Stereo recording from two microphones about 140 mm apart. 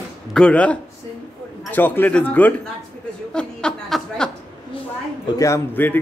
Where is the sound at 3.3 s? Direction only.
5° left (ahead or behind).